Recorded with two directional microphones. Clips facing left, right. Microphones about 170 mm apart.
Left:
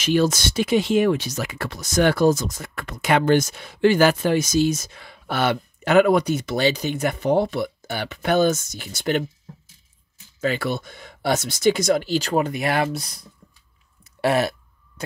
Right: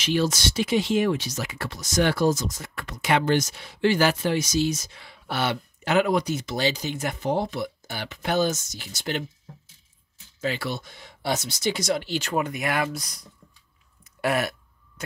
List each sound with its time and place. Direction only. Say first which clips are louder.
0.0 s speech: left 4 dB; 50° left (ahead or behind)
10.4 s speech: left 5 dB; 55° left (ahead or behind); by 13.3 s 30° left (ahead or behind)
14.0 s burping: left 5 dB; 30° left (ahead or behind)
15.0 s heart sounds: left 4 dB; 30° left (ahead or behind)